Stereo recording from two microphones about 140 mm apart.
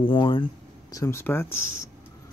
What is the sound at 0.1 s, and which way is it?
Speech, 35° left (ahead or behind).